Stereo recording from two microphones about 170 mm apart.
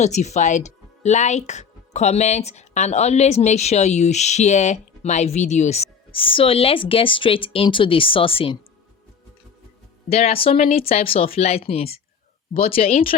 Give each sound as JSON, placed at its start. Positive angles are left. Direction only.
{"t": 0.0, "sound": "speech", "side_deg": 45}
{"t": 10.1, "sound": "speech", "side_deg": 35}